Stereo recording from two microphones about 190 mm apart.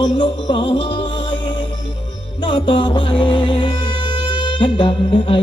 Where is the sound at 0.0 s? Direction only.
25° left (ahead or behind).